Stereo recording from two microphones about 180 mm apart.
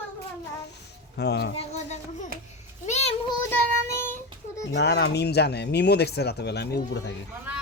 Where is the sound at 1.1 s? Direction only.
65° left (ahead or behind).